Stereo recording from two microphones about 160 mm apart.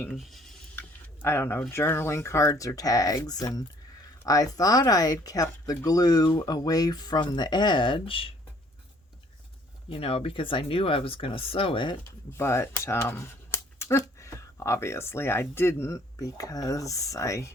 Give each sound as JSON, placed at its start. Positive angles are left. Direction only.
{"t": 0.1, "sound": "speech", "side_deg": 0}
{"t": 0.8, "sound": "a sound", "side_deg": 15}
{"t": 1.7, "sound": "speech", "side_deg": 15}
{"t": 9.9, "sound": "speech", "side_deg": 35}
{"t": 12.4, "sound": "speech", "side_deg": 15}